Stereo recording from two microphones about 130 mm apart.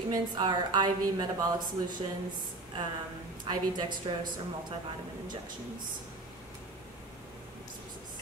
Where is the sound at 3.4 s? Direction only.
35° right (ahead or behind).